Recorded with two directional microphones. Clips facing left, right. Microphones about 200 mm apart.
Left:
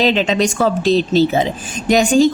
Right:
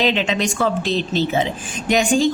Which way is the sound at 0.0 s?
35° left (ahead or behind).